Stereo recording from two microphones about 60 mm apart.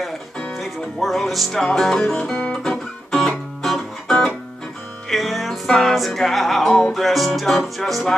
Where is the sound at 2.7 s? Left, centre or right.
Centre.